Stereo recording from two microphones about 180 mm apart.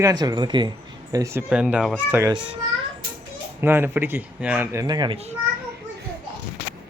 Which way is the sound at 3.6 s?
10° right (ahead or behind).